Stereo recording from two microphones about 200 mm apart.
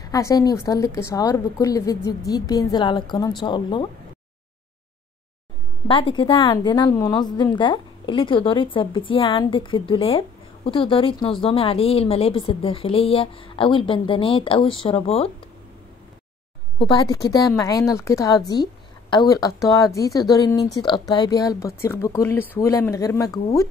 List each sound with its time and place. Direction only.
0.0 s a woman's voice: 15° left (ahead or behind)
5.9 s a woman's voice: 25° left (ahead or behind)
16.7 s a woman's voice: 20° left (ahead or behind)